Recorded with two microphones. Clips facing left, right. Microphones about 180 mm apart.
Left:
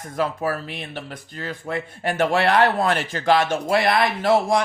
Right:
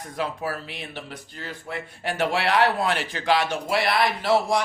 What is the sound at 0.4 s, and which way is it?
Speech, 45° left (ahead or behind).